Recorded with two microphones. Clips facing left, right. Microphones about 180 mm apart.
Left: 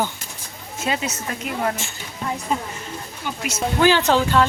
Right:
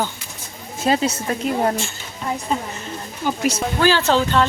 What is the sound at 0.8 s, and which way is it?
Speech, 35° right (ahead or behind).